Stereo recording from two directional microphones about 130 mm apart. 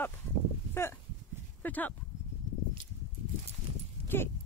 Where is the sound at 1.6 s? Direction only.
15° left (ahead or behind).